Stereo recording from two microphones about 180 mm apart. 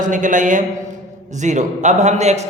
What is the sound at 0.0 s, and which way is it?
A man's voice, 45° right (ahead or behind).